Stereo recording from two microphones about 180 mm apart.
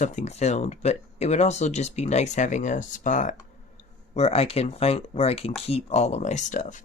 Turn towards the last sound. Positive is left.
turn(degrees=45)  # may be behind; listen again after turning